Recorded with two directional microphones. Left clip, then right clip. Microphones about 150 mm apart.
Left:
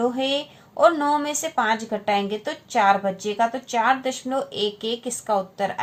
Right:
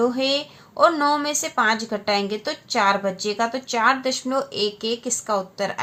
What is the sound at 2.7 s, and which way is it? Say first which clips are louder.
Speech: left 1 dB; 35° right (ahead or behind).